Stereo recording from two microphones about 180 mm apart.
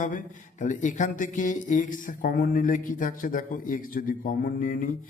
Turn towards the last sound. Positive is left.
turn(degrees=50)  # may be behind; listen again after turning